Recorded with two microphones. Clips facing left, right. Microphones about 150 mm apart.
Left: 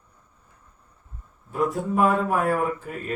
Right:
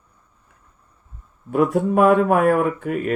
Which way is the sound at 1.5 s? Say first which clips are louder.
Right 7 dB; 65° right (ahead or behind).